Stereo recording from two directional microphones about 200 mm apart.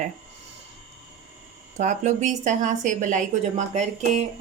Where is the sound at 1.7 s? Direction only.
35° right (ahead or behind).